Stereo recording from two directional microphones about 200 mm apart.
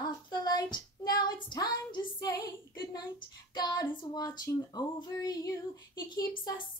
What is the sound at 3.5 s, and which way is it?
Speech, 20° left (ahead or behind).